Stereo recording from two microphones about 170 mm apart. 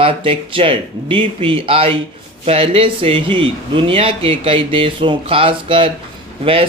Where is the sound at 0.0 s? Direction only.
30° right (ahead or behind).